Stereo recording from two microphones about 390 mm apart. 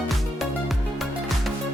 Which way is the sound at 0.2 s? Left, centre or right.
Centre.